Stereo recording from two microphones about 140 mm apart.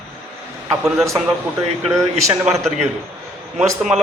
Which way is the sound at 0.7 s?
Centre (ahead or behind).